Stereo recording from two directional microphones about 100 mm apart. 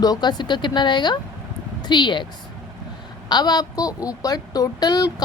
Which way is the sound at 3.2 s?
45° left (ahead or behind).